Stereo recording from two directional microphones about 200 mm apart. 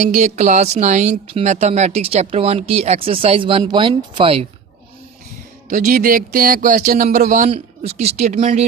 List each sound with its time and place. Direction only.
0.0 s a woman's voice: 35° right (ahead or behind)
5.6 s a woman's voice: 40° right (ahead or behind)